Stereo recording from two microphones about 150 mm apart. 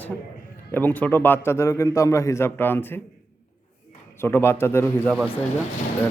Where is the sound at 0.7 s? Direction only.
10° left (ahead or behind).